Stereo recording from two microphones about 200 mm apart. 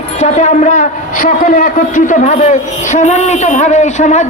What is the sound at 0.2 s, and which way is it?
A man's voice, 35° left (ahead or behind).